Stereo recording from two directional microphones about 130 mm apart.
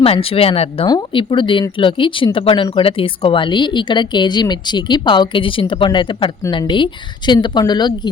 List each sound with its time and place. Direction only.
0.0 s speech: 45° left (ahead or behind)
0.9 s speech: 35° left (ahead or behind)